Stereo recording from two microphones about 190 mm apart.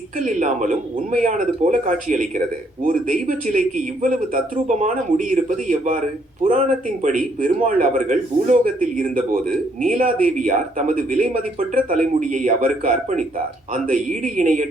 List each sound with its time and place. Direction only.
0.2 s a man's voice: 40° right (ahead or behind)